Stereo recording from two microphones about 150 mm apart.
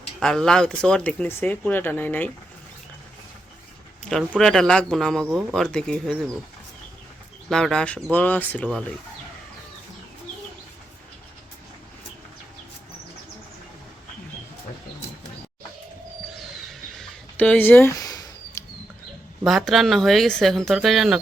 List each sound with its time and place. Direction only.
0.2 s speech: 5° left (ahead or behind)
4.4 s speech: 5° left (ahead or behind)
7.5 s speech: 5° left (ahead or behind)
16.6 s bird: centre (ahead or behind)
17.3 s a sound: 10° left (ahead or behind)
19.5 s speech: centre (ahead or behind)